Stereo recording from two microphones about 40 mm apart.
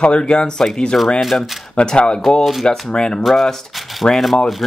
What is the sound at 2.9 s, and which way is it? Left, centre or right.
Speech, centre.